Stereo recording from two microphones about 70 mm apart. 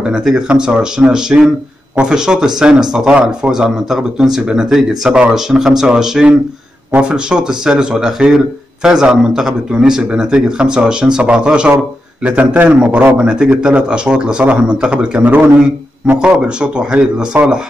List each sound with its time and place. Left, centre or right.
0.0 s a man's voice: centre